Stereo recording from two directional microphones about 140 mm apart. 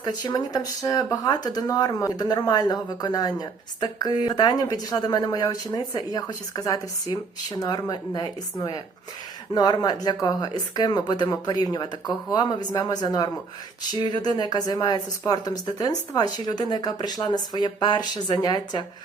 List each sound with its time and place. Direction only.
0.0 s speech: 30° left (ahead or behind)